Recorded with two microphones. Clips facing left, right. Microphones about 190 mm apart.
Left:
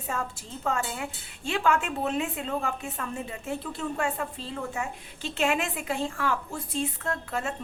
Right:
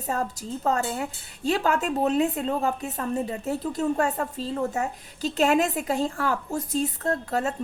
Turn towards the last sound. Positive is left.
turn(degrees=-40)  # may be behind; listen again after turning